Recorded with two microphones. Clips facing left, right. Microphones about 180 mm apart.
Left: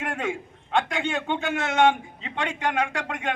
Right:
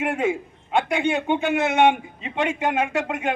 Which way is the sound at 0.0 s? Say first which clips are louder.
Right 6 dB; 20° right (ahead or behind).